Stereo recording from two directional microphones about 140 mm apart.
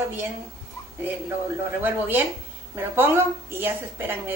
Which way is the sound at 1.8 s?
15° right (ahead or behind).